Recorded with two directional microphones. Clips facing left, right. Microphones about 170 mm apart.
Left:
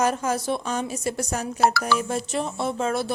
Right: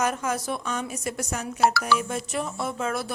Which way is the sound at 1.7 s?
50° left (ahead or behind).